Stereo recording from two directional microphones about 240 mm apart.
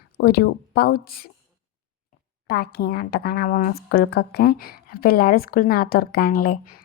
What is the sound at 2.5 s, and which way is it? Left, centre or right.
A woman's voice, left.